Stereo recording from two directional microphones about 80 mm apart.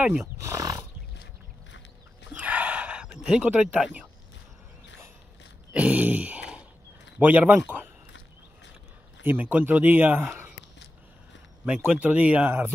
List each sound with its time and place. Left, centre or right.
0.5 s horse: right
2.3 s gasp: centre
3.7 s speech: centre
5.7 s a sound: centre
7.2 s speech: centre
9.2 s speech: right
11.6 s speech: centre